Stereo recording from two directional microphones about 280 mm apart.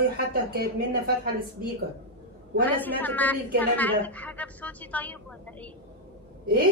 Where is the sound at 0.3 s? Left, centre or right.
Right.